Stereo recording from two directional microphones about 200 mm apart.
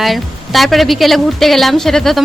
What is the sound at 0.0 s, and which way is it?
A woman's voice, centre (ahead or behind).